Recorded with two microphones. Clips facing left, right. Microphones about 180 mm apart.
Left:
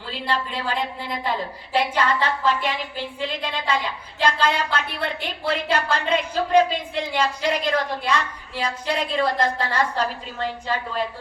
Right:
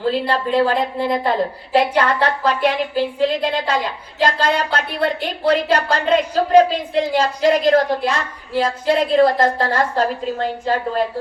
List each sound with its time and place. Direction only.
0.0 s a woman's voice: 45° right (ahead or behind)